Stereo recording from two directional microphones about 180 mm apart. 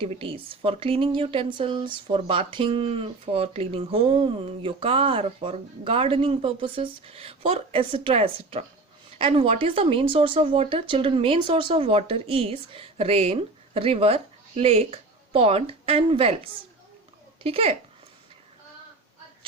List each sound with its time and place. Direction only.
0.0 s speech: 30° right (ahead or behind)